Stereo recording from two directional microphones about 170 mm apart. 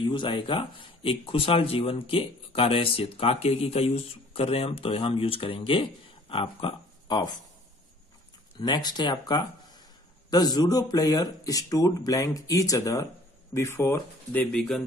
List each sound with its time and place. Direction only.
0.0 s speech: 30° left (ahead or behind)
8.5 s speech: 25° left (ahead or behind); by 14.8 s 5° left (ahead or behind)